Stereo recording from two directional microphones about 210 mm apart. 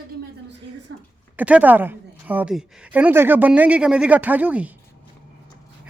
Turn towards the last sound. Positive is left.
turn(degrees=-5)  # may be behind; listen again after turning